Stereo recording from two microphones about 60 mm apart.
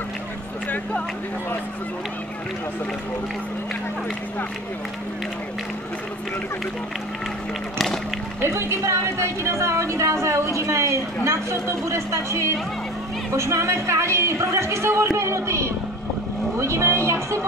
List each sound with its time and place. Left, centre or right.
8.4 s speech: right